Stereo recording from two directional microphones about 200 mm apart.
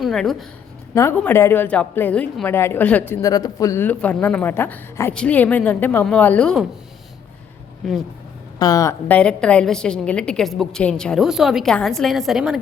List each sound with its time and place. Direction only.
0.0 s a woman's voice: centre (ahead or behind)
8.5 s a woman's voice: 20° left (ahead or behind); by 12.5 s centre (ahead or behind)